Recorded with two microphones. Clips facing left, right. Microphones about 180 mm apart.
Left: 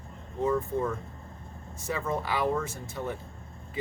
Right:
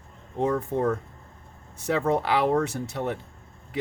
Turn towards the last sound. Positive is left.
turn(degrees=-70)  # may be behind; listen again after turning